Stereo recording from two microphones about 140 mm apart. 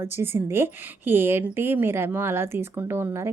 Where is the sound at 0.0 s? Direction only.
15° right (ahead or behind).